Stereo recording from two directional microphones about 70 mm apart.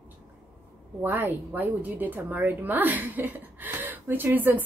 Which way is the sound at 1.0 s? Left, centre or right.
Right.